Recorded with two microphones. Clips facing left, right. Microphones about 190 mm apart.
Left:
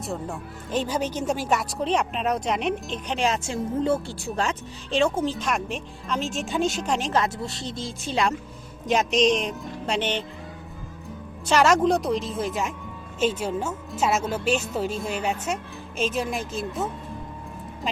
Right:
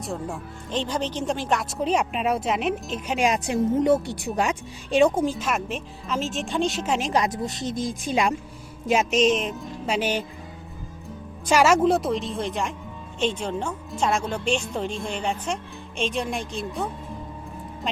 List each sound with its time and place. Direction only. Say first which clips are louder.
0.0 s speech: even; centre (ahead or behind)
1.8 s speech: right 1 dB; 5° right (ahead or behind)
7.1 s speech: right 1 dB; 15° right (ahead or behind)
11.4 s speech: right 1 dB; 10° right (ahead or behind)